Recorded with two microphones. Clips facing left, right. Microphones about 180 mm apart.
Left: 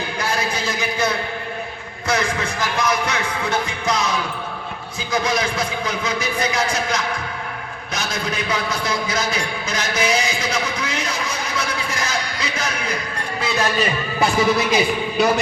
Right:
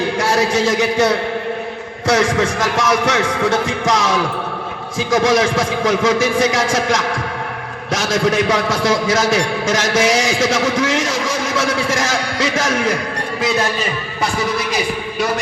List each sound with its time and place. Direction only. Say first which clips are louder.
0.0 s a man's voice: right 7 dB; 85° right